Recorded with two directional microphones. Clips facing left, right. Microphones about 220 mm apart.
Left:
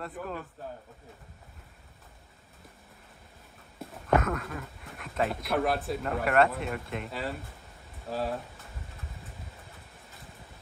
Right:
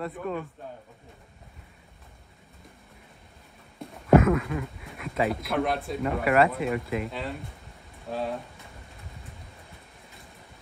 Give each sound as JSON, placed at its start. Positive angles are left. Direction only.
{"t": 0.0, "sound": "speech", "side_deg": 0}
{"t": 3.8, "sound": "a sound", "side_deg": 5}
{"t": 4.2, "sound": "speech", "side_deg": 0}